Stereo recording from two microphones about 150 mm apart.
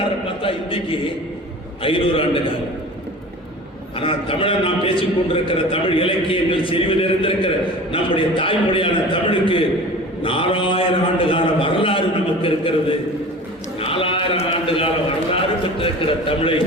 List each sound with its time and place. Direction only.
0.4 s a sound: 35° left (ahead or behind)
1.8 s a man's voice: 35° left (ahead or behind)
3.9 s a man's voice: 35° left (ahead or behind)
13.7 s sheep: 40° left (ahead or behind)
15.8 s a man's voice: 35° left (ahead or behind)